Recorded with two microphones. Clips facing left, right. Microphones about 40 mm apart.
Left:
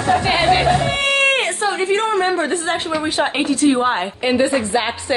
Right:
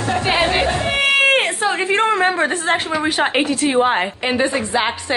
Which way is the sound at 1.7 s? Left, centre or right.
Right.